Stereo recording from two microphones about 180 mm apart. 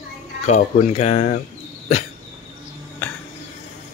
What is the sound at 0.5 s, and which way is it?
Speech, 40° left (ahead or behind).